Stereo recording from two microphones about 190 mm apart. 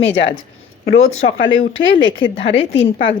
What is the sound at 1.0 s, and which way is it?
Speech, 90° left.